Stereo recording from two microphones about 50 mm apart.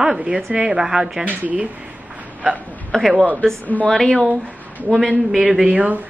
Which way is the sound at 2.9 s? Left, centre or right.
Centre.